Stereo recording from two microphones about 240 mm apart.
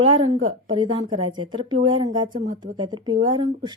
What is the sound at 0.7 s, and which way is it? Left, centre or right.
Speech, centre.